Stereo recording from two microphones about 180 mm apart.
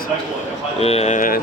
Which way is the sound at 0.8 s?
35° left (ahead or behind).